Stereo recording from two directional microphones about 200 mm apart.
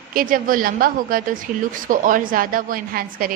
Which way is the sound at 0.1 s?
45° right (ahead or behind).